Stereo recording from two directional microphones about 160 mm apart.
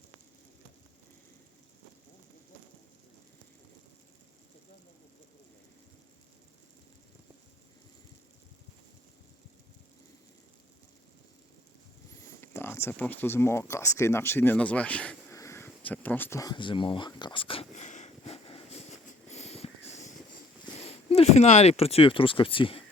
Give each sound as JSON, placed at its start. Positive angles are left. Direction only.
{"t": 12.4, "sound": "speech", "side_deg": 15}
{"t": 17.1, "sound": "a sound", "side_deg": 30}
{"t": 20.8, "sound": "speech", "side_deg": 40}